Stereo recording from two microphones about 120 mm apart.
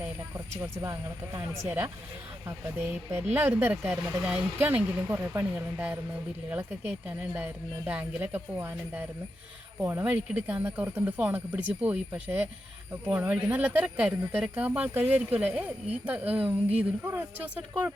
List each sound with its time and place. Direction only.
0.3 s speech: 25° right (ahead or behind)